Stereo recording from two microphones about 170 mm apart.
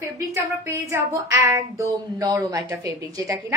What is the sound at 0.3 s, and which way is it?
A woman's voice, 15° right (ahead or behind).